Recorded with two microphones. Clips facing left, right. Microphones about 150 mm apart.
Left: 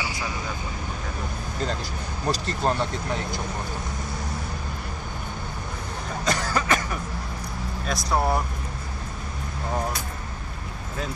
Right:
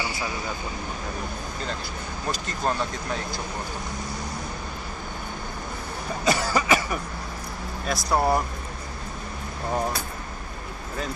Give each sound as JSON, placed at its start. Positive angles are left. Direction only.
{"t": 2.3, "sound": "speech", "side_deg": 30}
{"t": 6.2, "sound": "cough", "side_deg": -5}
{"t": 7.8, "sound": "speech", "side_deg": 0}